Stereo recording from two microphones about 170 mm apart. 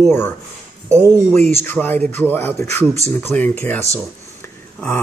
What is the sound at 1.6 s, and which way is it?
Speech, 10° left (ahead or behind).